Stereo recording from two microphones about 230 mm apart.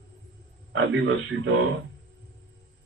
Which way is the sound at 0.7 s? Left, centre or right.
Right.